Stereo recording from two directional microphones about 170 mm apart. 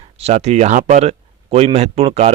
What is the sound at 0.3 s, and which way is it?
Speech, 40° right (ahead or behind).